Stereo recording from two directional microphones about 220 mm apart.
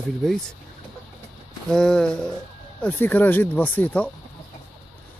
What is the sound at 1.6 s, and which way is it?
Speech, centre (ahead or behind).